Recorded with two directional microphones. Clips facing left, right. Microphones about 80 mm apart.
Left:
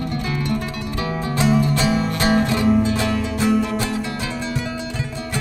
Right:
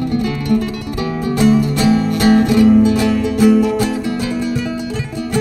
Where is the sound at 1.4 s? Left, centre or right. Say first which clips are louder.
Right 5 dB; left.